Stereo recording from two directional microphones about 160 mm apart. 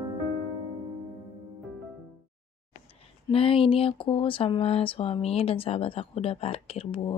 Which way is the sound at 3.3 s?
35° left (ahead or behind).